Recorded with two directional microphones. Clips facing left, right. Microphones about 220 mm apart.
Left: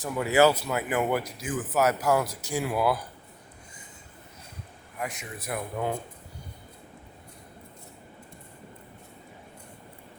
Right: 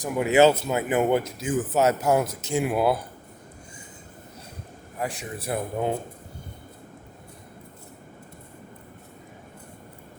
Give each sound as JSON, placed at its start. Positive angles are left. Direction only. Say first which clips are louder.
{"t": 0.0, "sound": "speech", "louder": "right 3 dB", "side_deg": -20}
{"t": 4.9, "sound": "a man's voice", "louder": "right 4 dB", "side_deg": -30}